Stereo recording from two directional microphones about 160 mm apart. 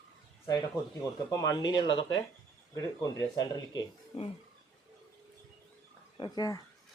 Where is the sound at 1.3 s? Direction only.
20° left (ahead or behind).